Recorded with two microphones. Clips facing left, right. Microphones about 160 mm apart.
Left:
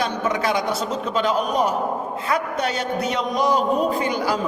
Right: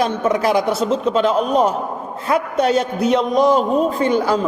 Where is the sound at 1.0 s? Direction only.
Centre (ahead or behind).